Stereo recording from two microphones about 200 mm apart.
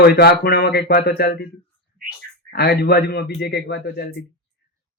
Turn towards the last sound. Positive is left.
turn(degrees=50)  # may be behind; listen again after turning